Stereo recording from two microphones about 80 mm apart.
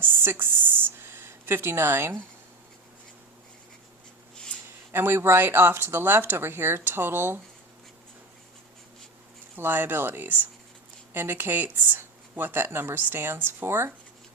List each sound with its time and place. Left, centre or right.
0.0 s a sound: right
4.9 s speech: right
9.6 s speech: right